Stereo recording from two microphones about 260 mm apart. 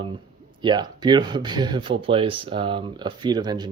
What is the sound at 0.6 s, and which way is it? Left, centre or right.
Speech, centre.